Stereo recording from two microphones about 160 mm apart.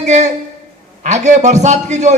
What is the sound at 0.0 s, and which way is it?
A man's voice, 45° right (ahead or behind).